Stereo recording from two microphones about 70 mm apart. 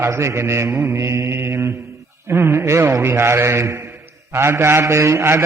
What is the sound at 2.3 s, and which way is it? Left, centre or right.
A man's voice, right.